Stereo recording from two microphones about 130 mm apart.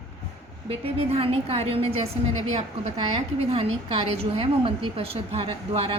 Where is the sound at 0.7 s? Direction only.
50° right (ahead or behind).